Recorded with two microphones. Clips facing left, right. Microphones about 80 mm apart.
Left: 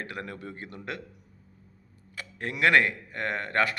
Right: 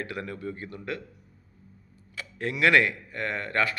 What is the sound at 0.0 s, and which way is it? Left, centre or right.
Speech, left.